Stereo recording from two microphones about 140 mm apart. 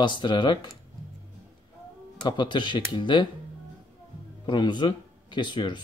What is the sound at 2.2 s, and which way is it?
Speech, 35° left (ahead or behind).